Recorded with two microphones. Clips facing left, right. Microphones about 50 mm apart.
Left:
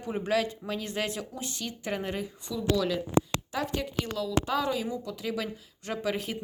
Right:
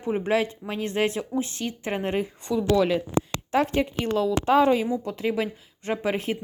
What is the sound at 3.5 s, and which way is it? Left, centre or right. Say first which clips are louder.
A woman's voice: right 13 dB; right.